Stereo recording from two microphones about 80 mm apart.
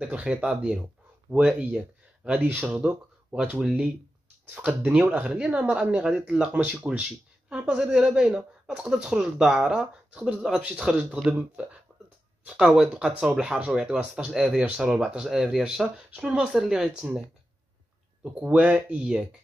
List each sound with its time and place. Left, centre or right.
0.0 s speech: centre
18.2 s speech: centre